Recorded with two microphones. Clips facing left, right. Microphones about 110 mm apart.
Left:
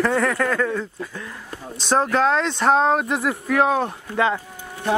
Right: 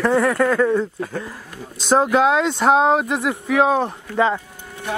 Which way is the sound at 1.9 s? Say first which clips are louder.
Right 3 dB; 5° right (ahead or behind).